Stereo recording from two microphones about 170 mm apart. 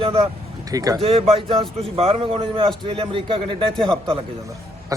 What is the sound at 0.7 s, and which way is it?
Speech, 20° right (ahead or behind).